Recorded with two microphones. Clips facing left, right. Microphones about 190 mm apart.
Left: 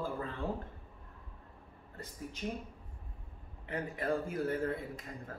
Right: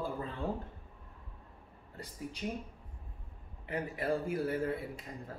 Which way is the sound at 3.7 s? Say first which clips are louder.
Right 1 dB; 10° right (ahead or behind).